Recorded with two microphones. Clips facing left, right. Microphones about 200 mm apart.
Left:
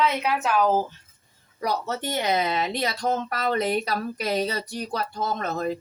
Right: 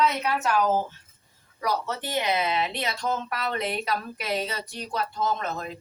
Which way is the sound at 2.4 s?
40° left (ahead or behind).